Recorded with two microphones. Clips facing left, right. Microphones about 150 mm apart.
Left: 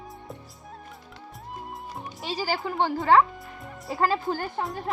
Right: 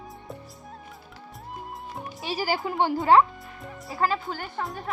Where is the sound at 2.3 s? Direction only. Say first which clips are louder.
Right 1 dB; 15° right (ahead or behind).